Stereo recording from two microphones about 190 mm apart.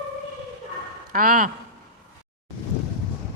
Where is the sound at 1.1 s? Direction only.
45° right (ahead or behind).